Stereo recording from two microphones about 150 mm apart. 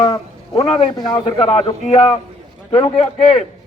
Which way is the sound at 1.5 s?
40° left (ahead or behind).